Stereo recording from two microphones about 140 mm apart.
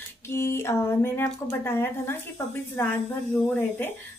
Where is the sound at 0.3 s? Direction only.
20° left (ahead or behind).